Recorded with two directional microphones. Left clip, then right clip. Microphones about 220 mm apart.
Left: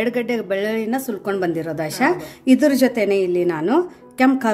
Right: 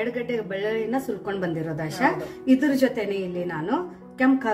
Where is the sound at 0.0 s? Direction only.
50° left (ahead or behind).